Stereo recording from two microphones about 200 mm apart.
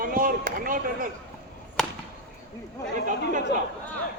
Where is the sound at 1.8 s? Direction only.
5° left (ahead or behind).